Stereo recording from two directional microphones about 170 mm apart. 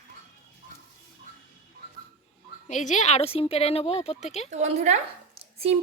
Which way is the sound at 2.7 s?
45° left (ahead or behind).